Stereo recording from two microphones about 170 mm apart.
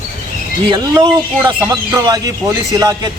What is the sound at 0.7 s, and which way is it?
A man's voice, 30° right (ahead or behind).